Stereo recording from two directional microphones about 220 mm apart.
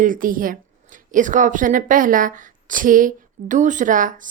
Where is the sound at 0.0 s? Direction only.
40° right (ahead or behind).